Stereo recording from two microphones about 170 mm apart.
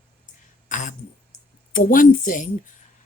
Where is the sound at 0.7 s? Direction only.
45° left (ahead or behind).